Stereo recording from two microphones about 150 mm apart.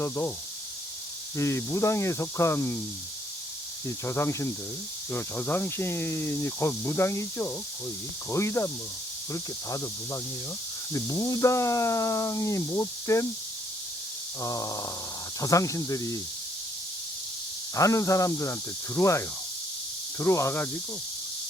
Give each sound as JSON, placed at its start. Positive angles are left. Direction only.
{"t": 0.0, "sound": "speech", "side_deg": 15}
{"t": 1.4, "sound": "speech", "side_deg": 20}
{"t": 3.8, "sound": "speech", "side_deg": 15}
{"t": 14.4, "sound": "speech", "side_deg": 20}
{"t": 17.7, "sound": "speech", "side_deg": 20}